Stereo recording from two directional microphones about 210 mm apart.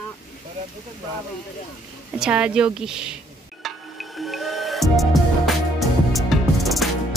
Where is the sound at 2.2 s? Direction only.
5° right (ahead or behind).